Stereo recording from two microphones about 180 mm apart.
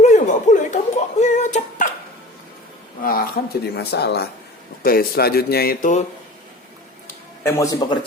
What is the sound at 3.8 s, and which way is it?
Speech, 65° left (ahead or behind).